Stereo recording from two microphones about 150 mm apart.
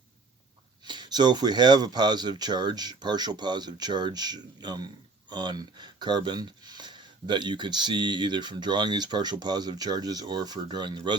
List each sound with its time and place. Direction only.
0.9 s speech: 30° right (ahead or behind)